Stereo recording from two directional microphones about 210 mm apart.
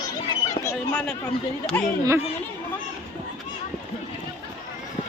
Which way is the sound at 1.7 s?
10° left (ahead or behind).